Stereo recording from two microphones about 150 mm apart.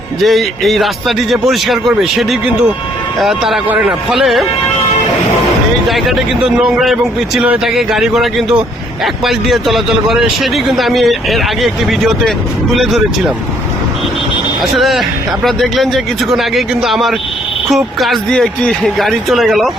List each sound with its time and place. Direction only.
0.2 s a man's voice: centre (ahead or behind)
5.9 s a man's voice: centre (ahead or behind)
14.6 s a man's voice: centre (ahead or behind)